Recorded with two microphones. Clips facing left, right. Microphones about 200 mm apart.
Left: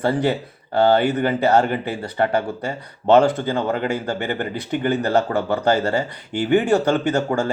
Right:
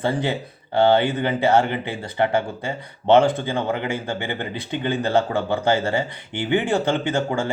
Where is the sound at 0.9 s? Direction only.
25° right (ahead or behind).